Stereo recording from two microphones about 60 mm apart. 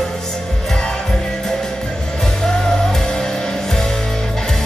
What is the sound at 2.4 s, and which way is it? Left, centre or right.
Music, centre.